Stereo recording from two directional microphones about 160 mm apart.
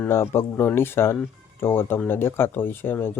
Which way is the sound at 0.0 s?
15° left (ahead or behind).